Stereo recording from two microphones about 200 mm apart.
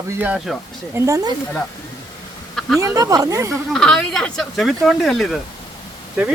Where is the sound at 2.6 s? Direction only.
Centre (ahead or behind).